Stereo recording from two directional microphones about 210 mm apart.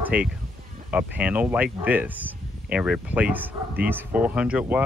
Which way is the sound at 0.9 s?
5° right (ahead or behind).